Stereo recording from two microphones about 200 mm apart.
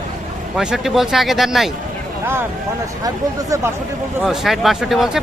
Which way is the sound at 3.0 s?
15° right (ahead or behind).